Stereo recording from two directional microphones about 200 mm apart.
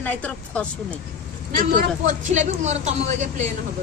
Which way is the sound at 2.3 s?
35° right (ahead or behind).